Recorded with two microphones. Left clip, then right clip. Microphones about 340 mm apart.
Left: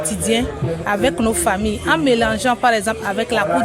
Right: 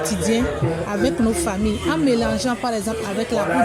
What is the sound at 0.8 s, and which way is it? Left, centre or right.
Speech, left.